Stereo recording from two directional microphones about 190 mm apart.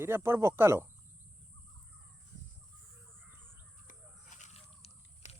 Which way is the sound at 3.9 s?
40° left (ahead or behind).